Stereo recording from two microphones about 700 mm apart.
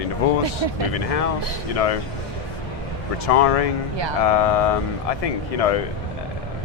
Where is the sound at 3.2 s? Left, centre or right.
Left.